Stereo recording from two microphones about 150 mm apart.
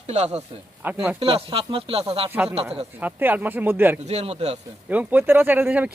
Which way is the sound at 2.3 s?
15° right (ahead or behind).